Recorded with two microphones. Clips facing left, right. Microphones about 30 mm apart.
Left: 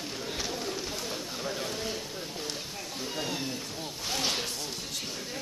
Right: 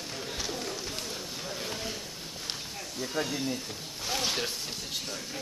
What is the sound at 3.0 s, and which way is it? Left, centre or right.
Speech, centre.